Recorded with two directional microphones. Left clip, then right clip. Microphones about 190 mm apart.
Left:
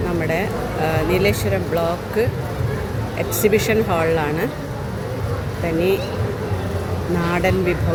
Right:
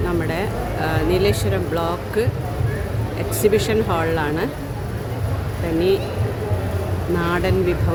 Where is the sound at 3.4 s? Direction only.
5° right (ahead or behind).